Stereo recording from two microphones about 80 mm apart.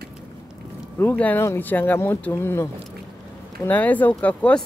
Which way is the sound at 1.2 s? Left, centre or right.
Centre.